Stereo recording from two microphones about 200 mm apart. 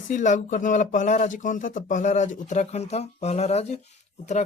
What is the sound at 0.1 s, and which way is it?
Speech, 40° left (ahead or behind).